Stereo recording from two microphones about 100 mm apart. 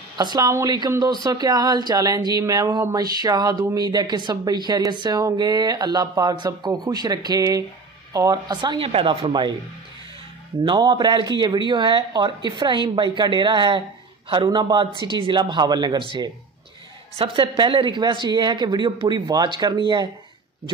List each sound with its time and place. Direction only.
0.2 s speech: 40° right (ahead or behind)
1.2 s a sound: 40° right (ahead or behind)
3.7 s speech: 40° right (ahead or behind)
7.2 s a sound: 35° right (ahead or behind)
8.1 s speech: 35° right (ahead or behind); by 9.6 s 50° right (ahead or behind)
10.6 s speech: 50° right (ahead or behind)